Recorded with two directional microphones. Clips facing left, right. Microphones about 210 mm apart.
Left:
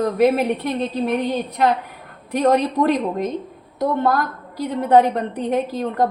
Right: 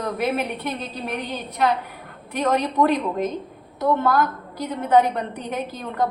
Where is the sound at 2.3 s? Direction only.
35° left (ahead or behind).